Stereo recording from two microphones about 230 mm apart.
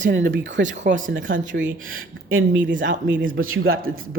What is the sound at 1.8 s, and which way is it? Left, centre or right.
Speech, right.